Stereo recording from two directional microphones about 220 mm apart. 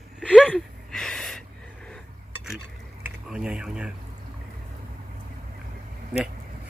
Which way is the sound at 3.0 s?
5° right (ahead or behind).